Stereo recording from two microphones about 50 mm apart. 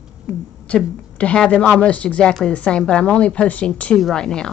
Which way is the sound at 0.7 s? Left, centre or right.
Left.